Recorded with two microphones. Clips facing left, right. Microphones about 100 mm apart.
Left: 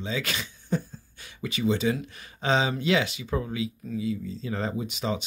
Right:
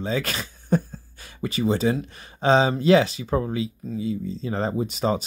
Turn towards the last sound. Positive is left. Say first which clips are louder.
# right 6 dB
turn(degrees=-40)  # may be behind; listen again after turning